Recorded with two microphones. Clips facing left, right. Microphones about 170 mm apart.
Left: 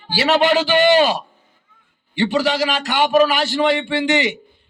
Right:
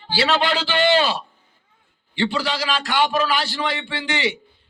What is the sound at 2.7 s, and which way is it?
A man's voice, 20° left (ahead or behind).